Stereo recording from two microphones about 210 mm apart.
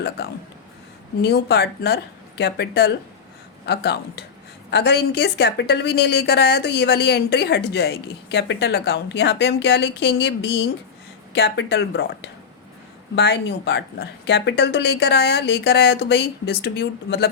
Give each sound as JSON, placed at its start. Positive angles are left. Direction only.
{"t": 1.2, "sound": "a woman's voice", "side_deg": 50}